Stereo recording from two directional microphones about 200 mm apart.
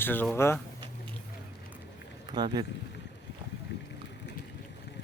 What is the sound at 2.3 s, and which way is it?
Speech, 20° right (ahead or behind).